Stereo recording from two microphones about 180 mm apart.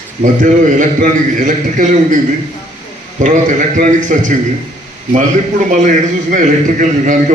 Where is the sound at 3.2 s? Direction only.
45° right (ahead or behind).